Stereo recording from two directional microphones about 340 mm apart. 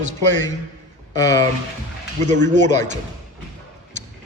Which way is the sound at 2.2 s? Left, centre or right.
Right.